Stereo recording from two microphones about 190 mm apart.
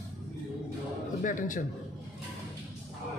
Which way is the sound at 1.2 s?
45° left (ahead or behind).